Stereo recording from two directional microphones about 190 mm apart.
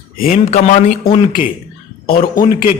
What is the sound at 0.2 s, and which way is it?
Speech, 40° left (ahead or behind).